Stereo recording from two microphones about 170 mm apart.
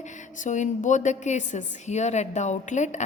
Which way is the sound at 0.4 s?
45° left (ahead or behind).